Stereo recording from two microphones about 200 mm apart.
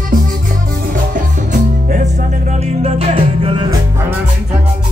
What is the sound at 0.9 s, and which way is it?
Music, 40° right (ahead or behind).